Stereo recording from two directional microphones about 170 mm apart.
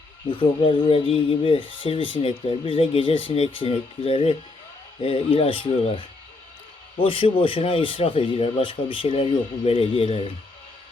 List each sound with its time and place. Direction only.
0.3 s speech: 30° left (ahead or behind)